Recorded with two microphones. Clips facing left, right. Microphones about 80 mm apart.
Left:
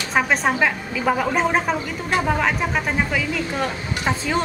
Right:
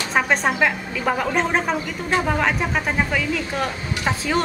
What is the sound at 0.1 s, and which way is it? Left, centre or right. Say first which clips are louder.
A woman's voice: left 1 dB; centre.